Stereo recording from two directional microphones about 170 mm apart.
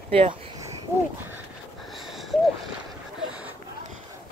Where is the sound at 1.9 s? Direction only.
Centre (ahead or behind).